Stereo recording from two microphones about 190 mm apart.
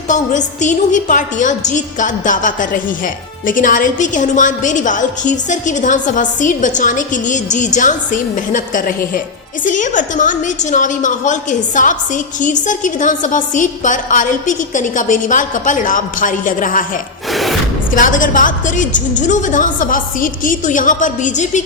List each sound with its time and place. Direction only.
0.1 s a woman's voice: 40° left (ahead or behind)
17.3 s a sound: centre (ahead or behind)
17.9 s a woman's voice: 45° left (ahead or behind)